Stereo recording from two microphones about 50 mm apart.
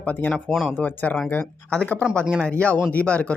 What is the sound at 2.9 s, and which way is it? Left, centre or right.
Speech, left.